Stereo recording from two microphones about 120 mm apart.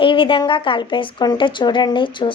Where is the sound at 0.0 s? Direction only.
45° left (ahead or behind).